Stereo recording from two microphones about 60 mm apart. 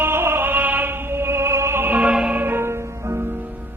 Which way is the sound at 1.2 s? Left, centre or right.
Right.